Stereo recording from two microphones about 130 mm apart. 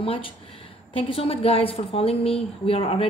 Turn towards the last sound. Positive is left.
turn(degrees=50)  # may be behind; listen again after turning